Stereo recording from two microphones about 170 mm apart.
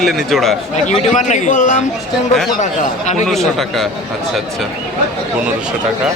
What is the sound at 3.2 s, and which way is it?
Speech, centre (ahead or behind).